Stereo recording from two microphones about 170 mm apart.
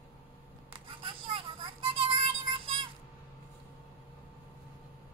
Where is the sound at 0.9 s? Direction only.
30° right (ahead or behind).